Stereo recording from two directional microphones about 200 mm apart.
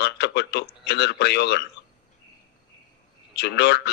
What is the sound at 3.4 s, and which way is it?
Speech, 55° left (ahead or behind).